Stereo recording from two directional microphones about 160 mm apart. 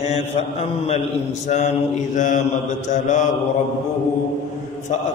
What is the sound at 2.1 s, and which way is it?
Mantra, 50° left (ahead or behind).